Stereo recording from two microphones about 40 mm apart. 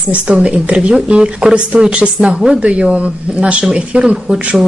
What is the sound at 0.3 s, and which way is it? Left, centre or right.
A woman's voice, right.